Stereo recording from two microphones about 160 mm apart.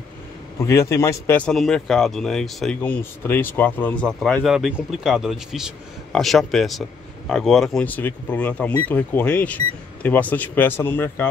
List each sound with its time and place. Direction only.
0.6 s speech: 20° left (ahead or behind)